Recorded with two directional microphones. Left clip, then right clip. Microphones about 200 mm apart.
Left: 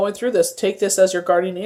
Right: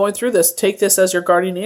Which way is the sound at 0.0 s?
30° right (ahead or behind).